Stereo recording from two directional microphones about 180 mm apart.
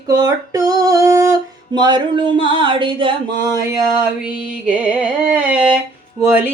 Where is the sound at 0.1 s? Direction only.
20° right (ahead or behind).